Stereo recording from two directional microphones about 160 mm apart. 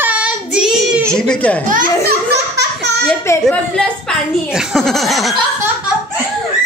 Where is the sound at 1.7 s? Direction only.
65° right (ahead or behind); by 2.9 s 90° right.